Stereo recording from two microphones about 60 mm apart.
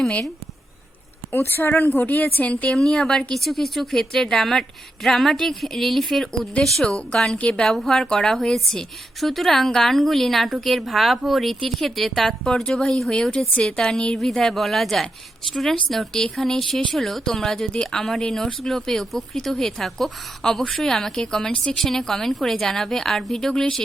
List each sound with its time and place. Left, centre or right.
1.3 s a woman's voice: left
2.6 s a woman's voice: centre
6.8 s a woman's voice: centre
12.5 s a woman's voice: centre